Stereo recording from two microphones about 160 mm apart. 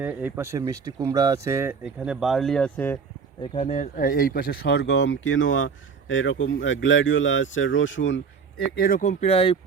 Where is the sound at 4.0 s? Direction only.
60° left (ahead or behind); by 5.1 s 90° left.